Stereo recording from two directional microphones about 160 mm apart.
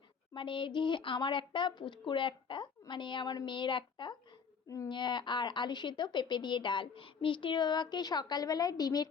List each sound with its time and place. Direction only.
0.3 s speech: 30° left (ahead or behind)